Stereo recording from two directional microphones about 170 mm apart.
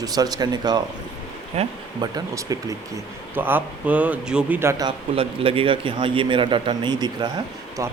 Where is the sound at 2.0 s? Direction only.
20° right (ahead or behind).